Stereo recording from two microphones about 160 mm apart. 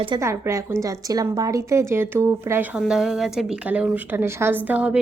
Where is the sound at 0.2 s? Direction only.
15° right (ahead or behind).